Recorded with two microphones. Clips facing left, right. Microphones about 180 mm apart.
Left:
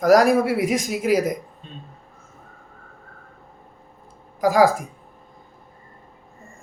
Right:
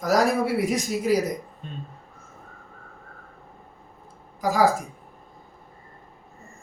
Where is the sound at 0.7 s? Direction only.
90° left.